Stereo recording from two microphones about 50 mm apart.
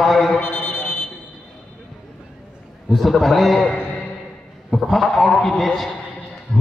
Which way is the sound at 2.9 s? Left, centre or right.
Centre.